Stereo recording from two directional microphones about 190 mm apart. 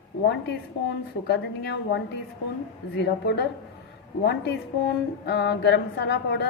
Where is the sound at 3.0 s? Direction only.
65° left (ahead or behind).